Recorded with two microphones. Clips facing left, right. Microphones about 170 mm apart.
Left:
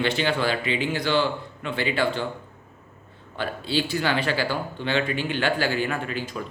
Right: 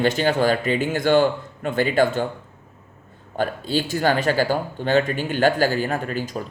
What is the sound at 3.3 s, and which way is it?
Speech, 45° right (ahead or behind).